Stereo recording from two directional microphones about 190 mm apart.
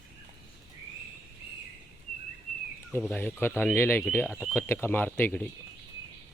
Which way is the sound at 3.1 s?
10° left (ahead or behind).